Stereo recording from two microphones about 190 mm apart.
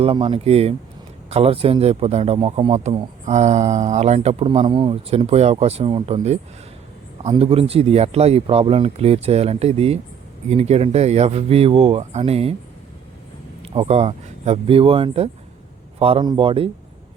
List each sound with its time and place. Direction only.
0.0 s a man's voice: 30° right (ahead or behind)
13.6 s a man's voice: 30° right (ahead or behind)